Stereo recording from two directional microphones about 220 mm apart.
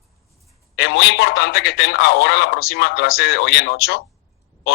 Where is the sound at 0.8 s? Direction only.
50° left (ahead or behind).